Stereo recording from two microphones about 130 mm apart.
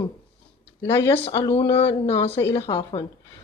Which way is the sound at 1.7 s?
45° left (ahead or behind).